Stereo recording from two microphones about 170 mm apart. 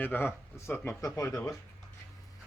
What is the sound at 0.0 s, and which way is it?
Speech, 10° left (ahead or behind).